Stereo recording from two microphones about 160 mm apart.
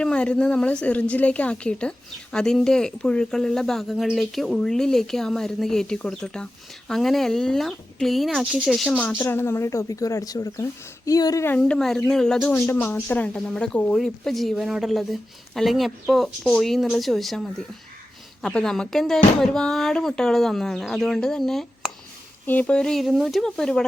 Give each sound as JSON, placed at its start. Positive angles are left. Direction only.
{"t": 0.0, "sound": "a woman's voice", "side_deg": 5}
{"t": 9.1, "sound": "a woman's voice", "side_deg": 15}
{"t": 11.5, "sound": "a woman's voice", "side_deg": 5}
{"t": 12.5, "sound": "a woman's voice", "side_deg": 15}